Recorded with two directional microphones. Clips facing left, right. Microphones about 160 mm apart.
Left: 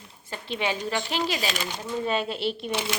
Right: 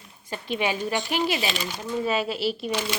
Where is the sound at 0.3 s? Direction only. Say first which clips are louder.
Right 2 dB; 15° right (ahead or behind).